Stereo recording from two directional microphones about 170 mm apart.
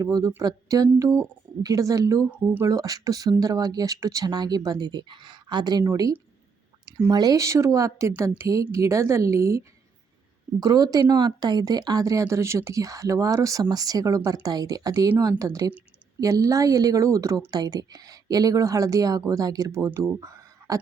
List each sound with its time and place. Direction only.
0.0 s a woman's voice: 20° right (ahead or behind)